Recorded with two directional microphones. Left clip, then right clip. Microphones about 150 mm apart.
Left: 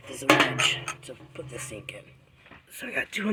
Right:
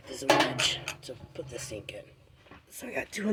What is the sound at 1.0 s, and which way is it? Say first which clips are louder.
Speech: even; 5° left (ahead or behind).